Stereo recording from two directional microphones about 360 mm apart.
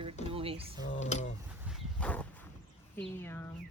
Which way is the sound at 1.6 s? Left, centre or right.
Centre.